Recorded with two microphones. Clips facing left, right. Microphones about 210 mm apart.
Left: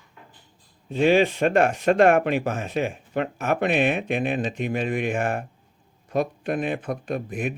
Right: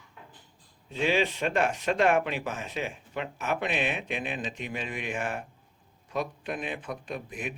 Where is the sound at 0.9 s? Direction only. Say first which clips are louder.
Left 8 dB; 50° left (ahead or behind).